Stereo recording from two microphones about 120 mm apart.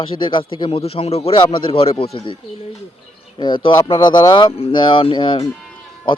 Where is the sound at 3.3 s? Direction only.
40° left (ahead or behind).